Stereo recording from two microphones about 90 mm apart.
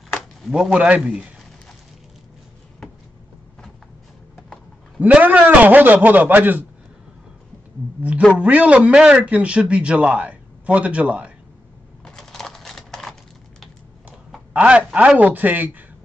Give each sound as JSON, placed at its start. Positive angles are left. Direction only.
{"t": 0.1, "sound": "a sound", "side_deg": 0}
{"t": 0.7, "sound": "a man's voice", "side_deg": -15}
{"t": 5.0, "sound": "a man's voice", "side_deg": -15}
{"t": 8.3, "sound": "a man's voice", "side_deg": -15}
{"t": 12.0, "sound": "typewriter", "side_deg": 5}
{"t": 14.5, "sound": "a man's voice", "side_deg": -15}